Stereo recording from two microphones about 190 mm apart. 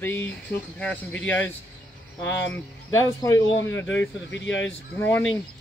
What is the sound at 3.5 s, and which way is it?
Speech, 85° left.